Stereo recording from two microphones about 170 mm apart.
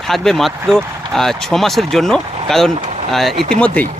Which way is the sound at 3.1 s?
Centre (ahead or behind).